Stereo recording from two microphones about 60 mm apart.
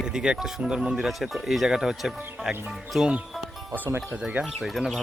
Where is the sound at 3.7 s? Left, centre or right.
Right.